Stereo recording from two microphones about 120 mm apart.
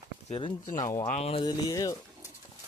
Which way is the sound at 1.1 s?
60° left (ahead or behind).